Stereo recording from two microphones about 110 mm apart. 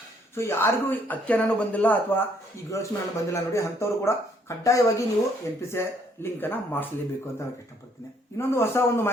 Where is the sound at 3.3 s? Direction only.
25° left (ahead or behind).